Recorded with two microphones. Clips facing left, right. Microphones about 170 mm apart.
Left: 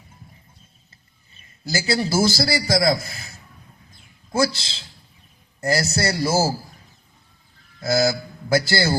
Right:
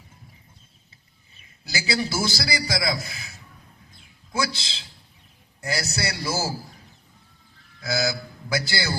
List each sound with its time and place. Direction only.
1.6 s a man's voice: 45° left (ahead or behind)
7.8 s a man's voice: 50° left (ahead or behind)